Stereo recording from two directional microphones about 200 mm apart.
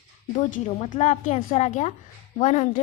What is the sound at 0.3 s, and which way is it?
A woman's voice, 35° left (ahead or behind).